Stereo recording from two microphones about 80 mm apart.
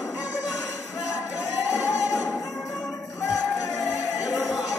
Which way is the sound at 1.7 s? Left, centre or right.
Left.